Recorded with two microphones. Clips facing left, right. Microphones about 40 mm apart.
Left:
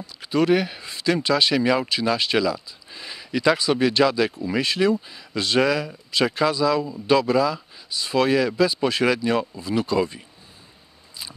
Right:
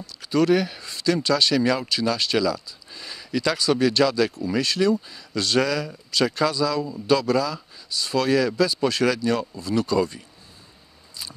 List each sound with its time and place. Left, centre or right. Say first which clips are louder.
0.0 s speech: even; centre